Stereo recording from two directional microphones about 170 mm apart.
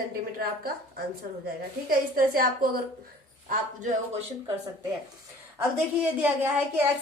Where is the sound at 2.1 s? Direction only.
55° right (ahead or behind).